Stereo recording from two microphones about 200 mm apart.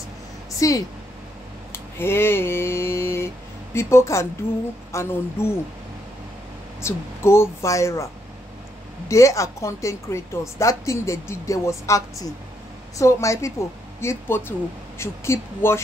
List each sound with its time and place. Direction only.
0.6 s speech: 15° left (ahead or behind)
1.7 s a sound: 10° left (ahead or behind)
3.7 s a woman's voice: 15° left (ahead or behind)
6.8 s a woman's voice: 15° left (ahead or behind)
9.1 s a woman's voice: 15° left (ahead or behind)